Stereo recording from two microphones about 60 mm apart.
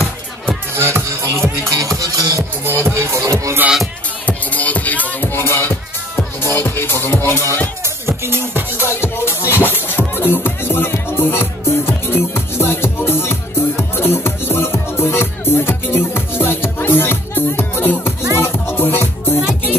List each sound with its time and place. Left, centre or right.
0.7 s speech: right
1.7 s music: right
2.6 s music: right
4.3 s music: left
5.3 s music: left
6.4 s speech: left
8.2 s music: right
8.7 s music: left